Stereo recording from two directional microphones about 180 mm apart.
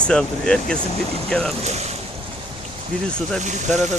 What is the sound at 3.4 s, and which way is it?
Speech, 40° right (ahead or behind).